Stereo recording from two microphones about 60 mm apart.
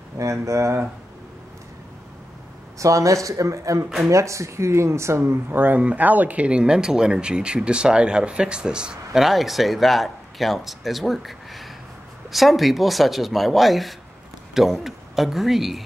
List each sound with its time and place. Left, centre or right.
0.2 s speech: right
2.8 s speech: right; by 15.8 s centre